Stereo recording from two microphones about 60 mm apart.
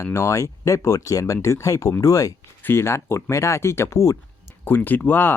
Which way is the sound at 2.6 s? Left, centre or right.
Left.